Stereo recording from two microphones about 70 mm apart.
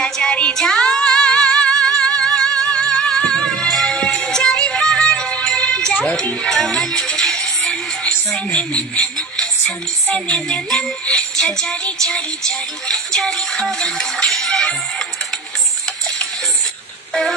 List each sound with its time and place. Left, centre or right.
0.0 s music: centre
10.0 s music: centre
10.3 s music: centre